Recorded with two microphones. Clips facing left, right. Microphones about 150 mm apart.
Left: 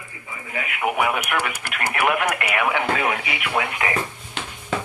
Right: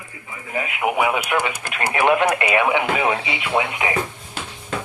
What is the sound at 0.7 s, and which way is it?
Speech, 20° right (ahead or behind).